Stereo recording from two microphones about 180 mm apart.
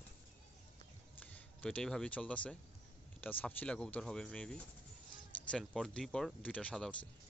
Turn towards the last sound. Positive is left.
turn(degrees=5)  # may be behind; listen again after turning